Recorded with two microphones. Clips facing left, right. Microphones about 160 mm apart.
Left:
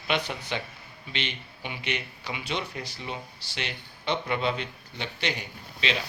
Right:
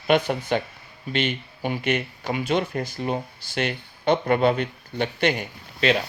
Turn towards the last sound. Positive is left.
turn(degrees=-50)  # may be behind; listen again after turning